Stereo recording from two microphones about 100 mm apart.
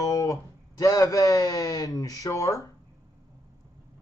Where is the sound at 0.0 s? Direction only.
35° left (ahead or behind).